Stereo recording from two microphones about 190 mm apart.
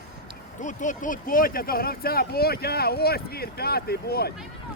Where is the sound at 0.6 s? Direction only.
40° left (ahead or behind).